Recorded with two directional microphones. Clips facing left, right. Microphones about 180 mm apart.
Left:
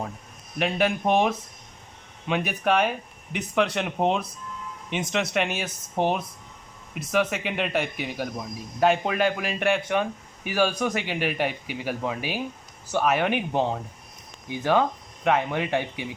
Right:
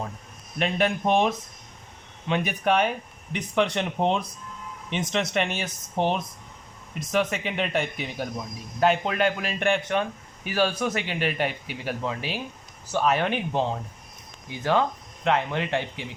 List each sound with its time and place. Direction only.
0.6 s speech: 5° left (ahead or behind)